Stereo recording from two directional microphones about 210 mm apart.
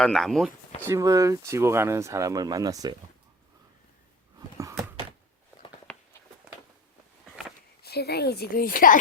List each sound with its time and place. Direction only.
0.0 s speech: centre (ahead or behind)
0.9 s speech: 15° right (ahead or behind)
4.4 s a sound: 15° right (ahead or behind)
7.8 s a woman's voice: 50° left (ahead or behind)